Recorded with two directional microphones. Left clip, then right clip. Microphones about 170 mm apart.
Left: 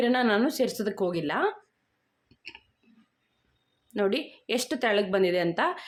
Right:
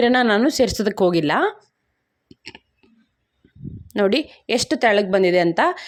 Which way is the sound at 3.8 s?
45° right (ahead or behind).